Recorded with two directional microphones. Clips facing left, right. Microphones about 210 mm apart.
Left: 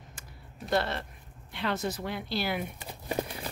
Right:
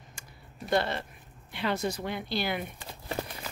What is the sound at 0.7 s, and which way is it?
Speech, centre (ahead or behind).